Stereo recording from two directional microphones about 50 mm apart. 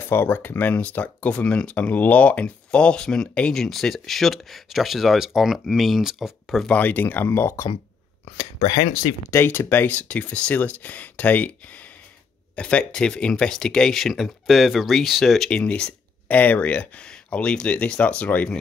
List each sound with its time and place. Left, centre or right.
0.1 s speech: left
1.3 s speech: left
3.5 s speech: centre
6.7 s speech: left
9.3 s speech: left
12.5 s speech: left; by 15.5 s centre
15.5 s speech: left